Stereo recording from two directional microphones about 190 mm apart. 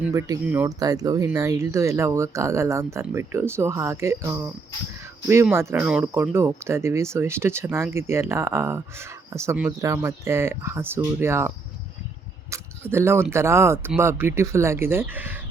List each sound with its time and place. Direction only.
0.0 s speech: 15° right (ahead or behind)